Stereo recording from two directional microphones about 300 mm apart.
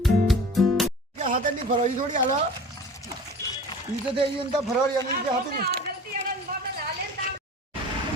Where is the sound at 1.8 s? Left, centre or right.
Right.